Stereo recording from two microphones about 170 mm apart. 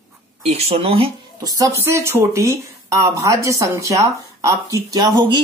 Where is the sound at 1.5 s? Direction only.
15° right (ahead or behind).